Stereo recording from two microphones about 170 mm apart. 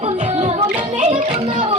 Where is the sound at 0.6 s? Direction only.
30° right (ahead or behind).